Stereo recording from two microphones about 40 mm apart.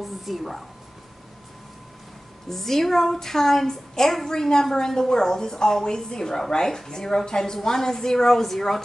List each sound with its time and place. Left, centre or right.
0.0 s speech: centre
2.5 s a woman's voice: centre